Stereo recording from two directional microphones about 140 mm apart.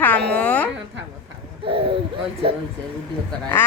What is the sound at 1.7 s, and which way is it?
Speech, 40° right (ahead or behind).